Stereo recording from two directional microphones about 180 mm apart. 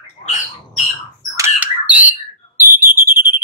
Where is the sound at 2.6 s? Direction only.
10° right (ahead or behind).